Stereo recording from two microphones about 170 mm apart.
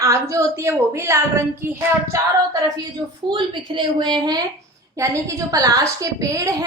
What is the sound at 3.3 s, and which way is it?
A woman's voice, 30° right (ahead or behind).